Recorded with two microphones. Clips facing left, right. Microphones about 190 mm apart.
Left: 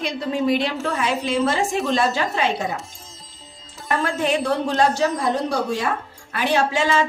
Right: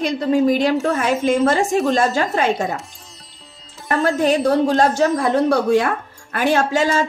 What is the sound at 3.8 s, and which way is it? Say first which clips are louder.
A woman's voice: right 5 dB; 40° right (ahead or behind).